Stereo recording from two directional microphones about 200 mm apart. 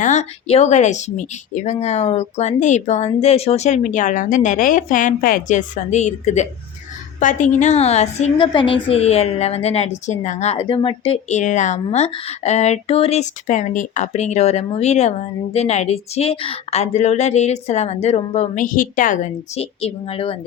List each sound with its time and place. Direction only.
0.0 s a woman's voice: 35° left (ahead or behind)